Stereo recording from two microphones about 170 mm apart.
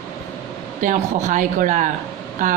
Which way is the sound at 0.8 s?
50° right (ahead or behind).